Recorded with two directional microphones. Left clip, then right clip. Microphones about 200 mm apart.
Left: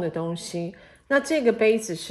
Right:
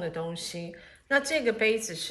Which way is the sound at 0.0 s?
50° left (ahead or behind).